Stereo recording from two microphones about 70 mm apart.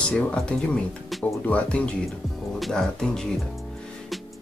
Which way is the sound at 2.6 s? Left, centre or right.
Centre.